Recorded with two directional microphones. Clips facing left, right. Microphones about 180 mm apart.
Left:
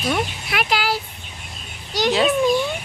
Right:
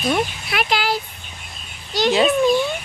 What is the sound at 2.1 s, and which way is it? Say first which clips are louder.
Speech: right 2 dB; centre (ahead or behind).